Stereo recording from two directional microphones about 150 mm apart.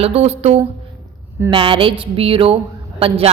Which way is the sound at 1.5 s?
35° right (ahead or behind).